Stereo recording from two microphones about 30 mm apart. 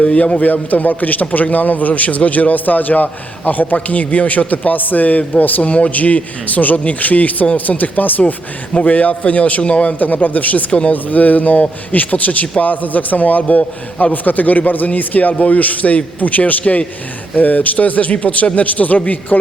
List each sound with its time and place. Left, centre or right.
0.0 s a man's voice: left
0.4 s a man's voice: left
3.8 s a man's voice: left
5.6 s a man's voice: left
6.0 s a man's voice: left
8.8 s a man's voice: left
10.0 s a man's voice: left
10.7 s a man's voice: left
10.9 s a man's voice: left
14.9 s a man's voice: left
17.3 s a man's voice: left
18.5 s a man's voice: left